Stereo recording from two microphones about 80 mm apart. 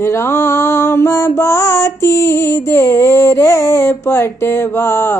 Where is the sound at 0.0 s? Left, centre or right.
Left.